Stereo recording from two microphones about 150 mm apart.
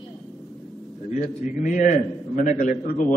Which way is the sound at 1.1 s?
55° left (ahead or behind).